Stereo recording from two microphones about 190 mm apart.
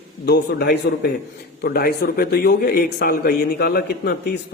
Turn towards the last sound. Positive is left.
turn(degrees=55)  # may be behind; listen again after turning